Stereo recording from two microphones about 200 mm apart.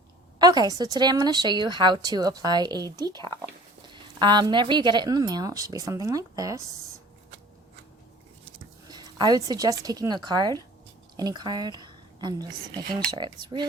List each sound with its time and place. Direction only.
0.3 s a woman's voice: 20° right (ahead or behind)
8.9 s a woman's voice: 20° right (ahead or behind)